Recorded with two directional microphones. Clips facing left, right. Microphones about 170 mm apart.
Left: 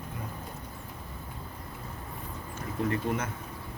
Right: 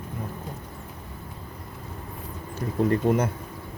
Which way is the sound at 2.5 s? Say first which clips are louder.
Right 7 dB; 35° right (ahead or behind).